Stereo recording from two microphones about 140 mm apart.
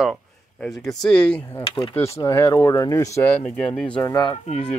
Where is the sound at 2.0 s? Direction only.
20° left (ahead or behind).